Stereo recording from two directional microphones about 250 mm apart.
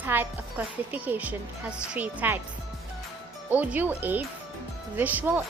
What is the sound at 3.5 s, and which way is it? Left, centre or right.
Speech, centre.